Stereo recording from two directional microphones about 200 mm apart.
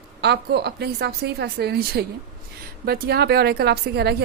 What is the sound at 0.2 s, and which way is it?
A woman's voice, 55° right (ahead or behind).